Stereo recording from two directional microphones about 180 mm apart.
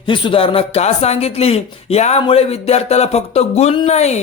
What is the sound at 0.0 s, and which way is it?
Speech, 25° left (ahead or behind).